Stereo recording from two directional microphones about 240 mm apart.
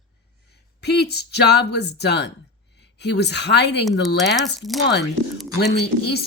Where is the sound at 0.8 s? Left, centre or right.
Left.